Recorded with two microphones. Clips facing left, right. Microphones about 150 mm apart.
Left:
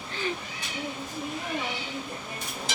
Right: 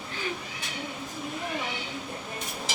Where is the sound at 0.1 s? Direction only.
5° right (ahead or behind).